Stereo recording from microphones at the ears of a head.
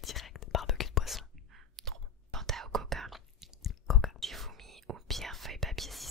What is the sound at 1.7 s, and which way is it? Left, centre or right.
Whispering, right.